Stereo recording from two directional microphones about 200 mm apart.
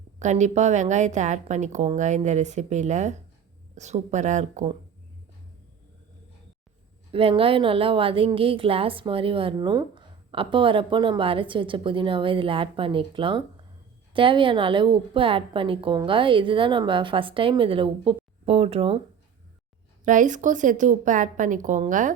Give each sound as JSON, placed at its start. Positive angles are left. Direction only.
{"t": 0.2, "sound": "a woman's voice", "side_deg": -35}
{"t": 7.1, "sound": "a woman's voice", "side_deg": -25}
{"t": 20.1, "sound": "a woman's voice", "side_deg": -40}